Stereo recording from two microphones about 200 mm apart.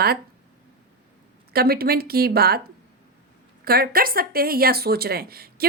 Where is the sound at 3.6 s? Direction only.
50° right (ahead or behind).